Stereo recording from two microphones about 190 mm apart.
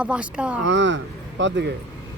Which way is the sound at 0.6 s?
70° right (ahead or behind).